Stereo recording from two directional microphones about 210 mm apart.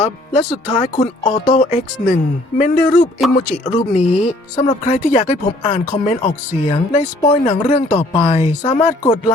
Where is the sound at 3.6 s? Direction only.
35° left (ahead or behind).